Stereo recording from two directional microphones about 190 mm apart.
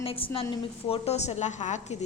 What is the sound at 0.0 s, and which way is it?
A woman's voice, 30° left (ahead or behind).